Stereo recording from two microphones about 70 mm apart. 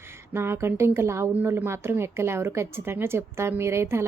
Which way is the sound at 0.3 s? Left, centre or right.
Right.